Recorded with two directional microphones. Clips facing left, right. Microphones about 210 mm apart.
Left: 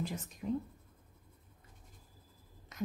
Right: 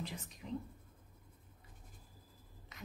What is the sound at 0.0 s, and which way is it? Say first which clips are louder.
Speech: left 6 dB; 45° left (ahead or behind).